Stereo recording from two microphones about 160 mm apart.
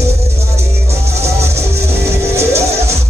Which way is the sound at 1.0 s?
40° right (ahead or behind).